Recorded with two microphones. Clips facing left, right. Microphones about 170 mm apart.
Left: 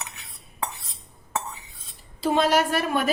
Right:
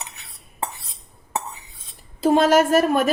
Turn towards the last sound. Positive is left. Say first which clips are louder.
# right 6 dB
turn(degrees=-45)  # may be behind; listen again after turning